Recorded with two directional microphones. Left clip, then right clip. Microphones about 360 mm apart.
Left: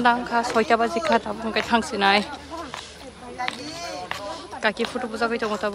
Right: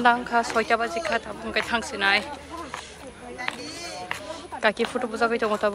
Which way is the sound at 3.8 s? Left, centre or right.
Left.